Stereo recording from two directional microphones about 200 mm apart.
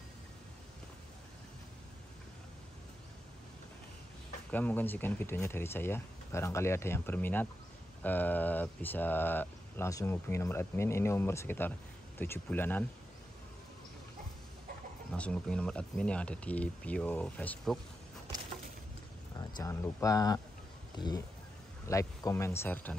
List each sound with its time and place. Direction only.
4.5 s speech: 10° left (ahead or behind)
15.1 s speech: 5° left (ahead or behind)
19.3 s speech: 20° left (ahead or behind)